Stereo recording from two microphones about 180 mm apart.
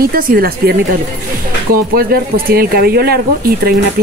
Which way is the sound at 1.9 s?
55° right (ahead or behind).